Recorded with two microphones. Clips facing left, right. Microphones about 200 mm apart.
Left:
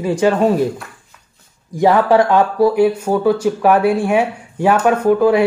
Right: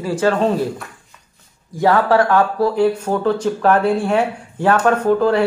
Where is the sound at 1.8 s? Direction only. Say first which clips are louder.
Left 2 dB; 15° left (ahead or behind).